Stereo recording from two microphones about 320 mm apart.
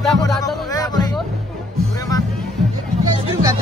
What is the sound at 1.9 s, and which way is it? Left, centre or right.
Music, centre.